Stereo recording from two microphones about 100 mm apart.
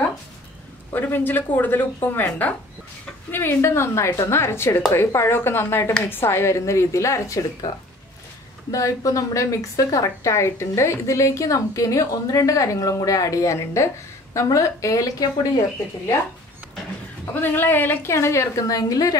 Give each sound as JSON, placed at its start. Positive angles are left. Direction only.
{"t": 0.9, "sound": "a woman's voice", "side_deg": 20}
{"t": 8.7, "sound": "a woman's voice", "side_deg": 35}
{"t": 17.3, "sound": "a woman's voice", "side_deg": 20}